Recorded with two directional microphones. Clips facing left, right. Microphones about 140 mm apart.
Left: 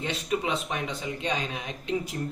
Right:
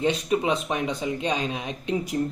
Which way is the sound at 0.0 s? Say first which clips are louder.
Right 6 dB; 20° right (ahead or behind).